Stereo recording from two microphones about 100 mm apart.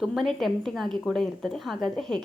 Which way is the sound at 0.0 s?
Centre (ahead or behind).